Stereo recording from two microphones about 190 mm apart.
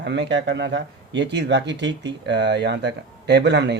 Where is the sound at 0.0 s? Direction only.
65° right (ahead or behind).